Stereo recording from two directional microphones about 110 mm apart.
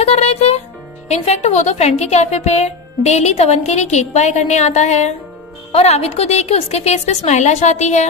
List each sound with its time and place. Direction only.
0.0 s music: 70° left (ahead or behind)
1.0 s a woman's voice: 80° left
5.7 s a woman's voice: 70° left (ahead or behind); by 8.1 s 90° left